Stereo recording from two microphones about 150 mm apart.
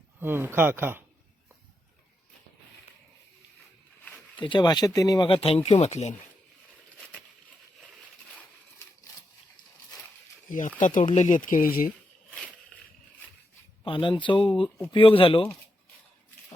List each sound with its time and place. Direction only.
0.2 s speech: 15° right (ahead or behind)
4.4 s speech: 30° left (ahead or behind); by 6.1 s 45° left (ahead or behind)
10.8 s speech: 60° left (ahead or behind)
13.8 s speech: 35° left (ahead or behind)